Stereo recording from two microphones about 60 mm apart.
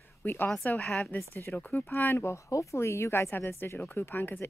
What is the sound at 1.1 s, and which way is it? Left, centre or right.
Speech, left.